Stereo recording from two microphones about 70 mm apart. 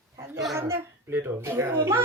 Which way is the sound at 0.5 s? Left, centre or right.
Right.